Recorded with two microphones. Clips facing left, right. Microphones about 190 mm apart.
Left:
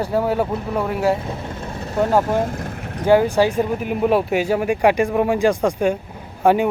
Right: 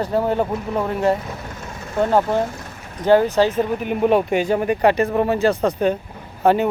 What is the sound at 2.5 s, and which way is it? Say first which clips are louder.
Vehicle: left 7 dB; 55° left (ahead or behind).